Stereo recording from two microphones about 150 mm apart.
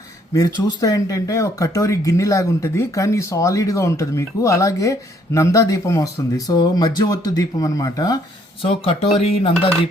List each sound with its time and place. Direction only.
0.3 s speech: 25° left (ahead or behind)
8.6 s speech: 40° left (ahead or behind)